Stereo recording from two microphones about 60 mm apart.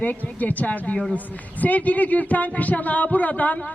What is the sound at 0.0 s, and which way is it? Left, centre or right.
Speech, left.